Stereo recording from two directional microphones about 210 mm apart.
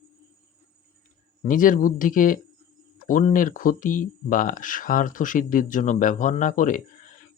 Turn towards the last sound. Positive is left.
turn(degrees=40)  # may be behind; listen again after turning